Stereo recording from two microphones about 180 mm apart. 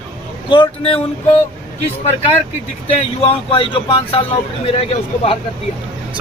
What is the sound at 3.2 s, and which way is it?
Speech, 30° left (ahead or behind).